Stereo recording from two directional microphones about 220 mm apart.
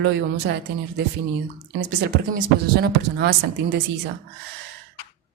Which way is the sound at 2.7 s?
50° right (ahead or behind).